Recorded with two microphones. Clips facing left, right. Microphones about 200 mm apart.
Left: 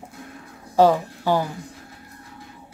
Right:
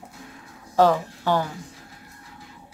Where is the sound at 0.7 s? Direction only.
10° left (ahead or behind).